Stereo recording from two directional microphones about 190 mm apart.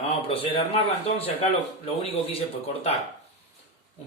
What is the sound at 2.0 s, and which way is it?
Speech, 30° left (ahead or behind).